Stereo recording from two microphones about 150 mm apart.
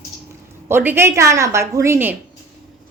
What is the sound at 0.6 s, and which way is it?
Speech, 15° right (ahead or behind).